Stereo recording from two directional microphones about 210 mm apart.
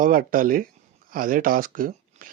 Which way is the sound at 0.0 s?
40° right (ahead or behind).